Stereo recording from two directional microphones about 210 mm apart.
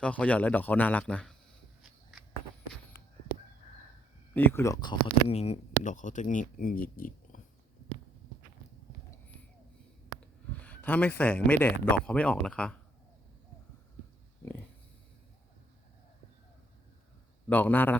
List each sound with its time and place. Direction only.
0.0 s a man's voice: 5° left (ahead or behind)
1.8 s a sound: centre (ahead or behind)
4.4 s a man's voice: 10° left (ahead or behind)
5.3 s speech: 30° left (ahead or behind)
10.2 s speech: 5° left (ahead or behind)
17.5 s a man's voice: 10° left (ahead or behind)